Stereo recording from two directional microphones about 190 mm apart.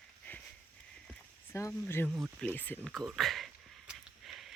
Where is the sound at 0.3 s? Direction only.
10° left (ahead or behind).